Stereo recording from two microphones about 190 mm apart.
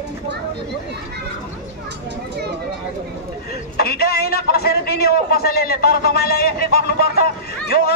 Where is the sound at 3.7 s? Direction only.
55° left (ahead or behind).